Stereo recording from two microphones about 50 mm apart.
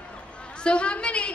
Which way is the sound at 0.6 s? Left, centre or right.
Left.